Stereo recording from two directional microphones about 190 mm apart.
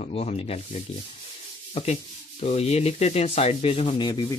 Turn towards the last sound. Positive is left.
turn(degrees=25)  # may be behind; listen again after turning